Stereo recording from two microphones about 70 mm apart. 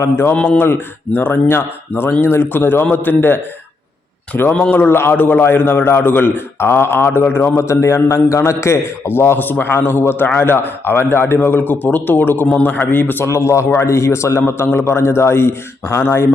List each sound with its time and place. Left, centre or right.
0.0 s a man's voice: left
4.8 s a man's voice: left
13.3 s a man's voice: left